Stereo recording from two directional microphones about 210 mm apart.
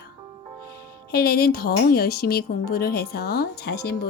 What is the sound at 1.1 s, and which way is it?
A woman's voice, 50° left (ahead or behind).